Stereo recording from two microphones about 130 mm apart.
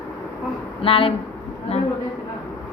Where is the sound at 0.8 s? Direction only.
45° left (ahead or behind).